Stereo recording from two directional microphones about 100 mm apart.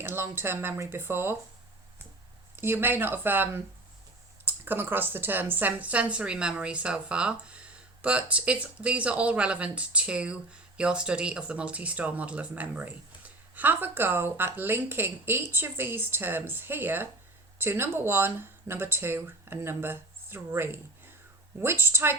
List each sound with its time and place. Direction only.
0.0 s speech: 25° right (ahead or behind)
2.6 s speech: 20° right (ahead or behind)